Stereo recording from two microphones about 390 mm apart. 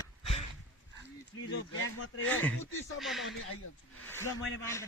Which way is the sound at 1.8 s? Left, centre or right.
Left.